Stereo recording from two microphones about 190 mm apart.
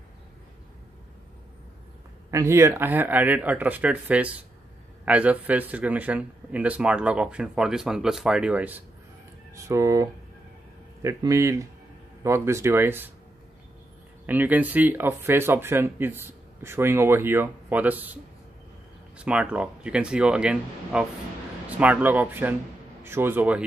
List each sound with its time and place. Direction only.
2.3 s speech: 15° right (ahead or behind)
14.2 s speech: 10° right (ahead or behind)